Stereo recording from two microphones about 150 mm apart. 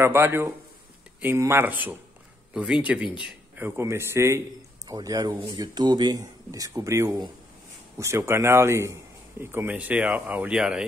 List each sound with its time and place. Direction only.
0.0 s speech: 15° right (ahead or behind)